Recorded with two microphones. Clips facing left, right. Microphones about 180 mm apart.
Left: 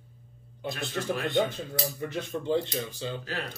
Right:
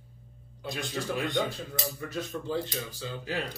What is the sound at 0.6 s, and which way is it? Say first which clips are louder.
Speech: left 2 dB; 15° right (ahead or behind).